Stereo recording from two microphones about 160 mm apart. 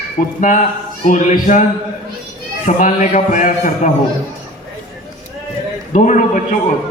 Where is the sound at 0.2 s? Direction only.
55° left (ahead or behind).